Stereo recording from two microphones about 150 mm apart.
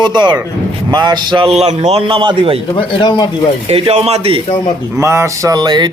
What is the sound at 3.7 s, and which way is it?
Speech, 40° right (ahead or behind).